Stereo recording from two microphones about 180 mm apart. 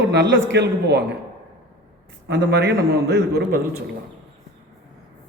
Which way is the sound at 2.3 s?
70° right (ahead or behind).